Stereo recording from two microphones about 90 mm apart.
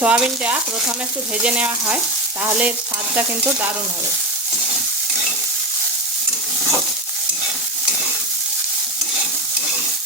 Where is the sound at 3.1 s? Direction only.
20° right (ahead or behind).